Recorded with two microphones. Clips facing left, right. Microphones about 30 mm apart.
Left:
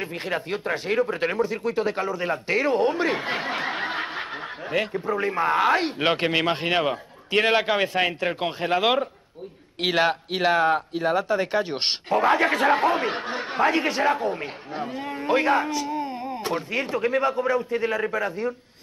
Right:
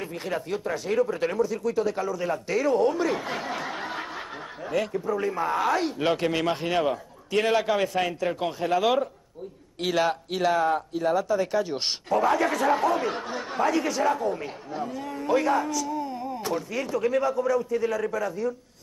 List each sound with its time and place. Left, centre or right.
0.0 s speech: left